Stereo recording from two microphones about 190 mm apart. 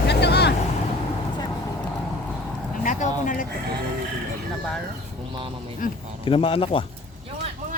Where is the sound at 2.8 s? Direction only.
45° left (ahead or behind).